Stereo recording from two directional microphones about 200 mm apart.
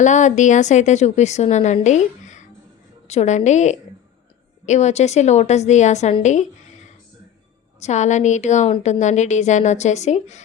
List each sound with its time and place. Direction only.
0.0 s a woman's voice: 40° left (ahead or behind)
7.8 s a woman's voice: 35° left (ahead or behind)